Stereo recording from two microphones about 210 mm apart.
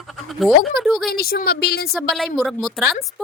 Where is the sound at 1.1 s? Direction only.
45° left (ahead or behind).